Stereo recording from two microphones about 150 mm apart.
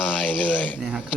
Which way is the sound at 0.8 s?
5° right (ahead or behind).